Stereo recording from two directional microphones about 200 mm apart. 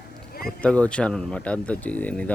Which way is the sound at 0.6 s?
5° left (ahead or behind).